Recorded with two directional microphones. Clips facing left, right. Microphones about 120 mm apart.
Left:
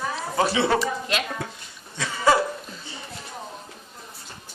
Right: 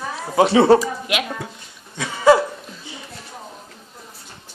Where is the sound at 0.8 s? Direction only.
10° right (ahead or behind).